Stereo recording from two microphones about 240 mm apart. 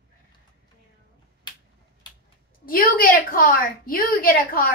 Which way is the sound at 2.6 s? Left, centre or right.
Left.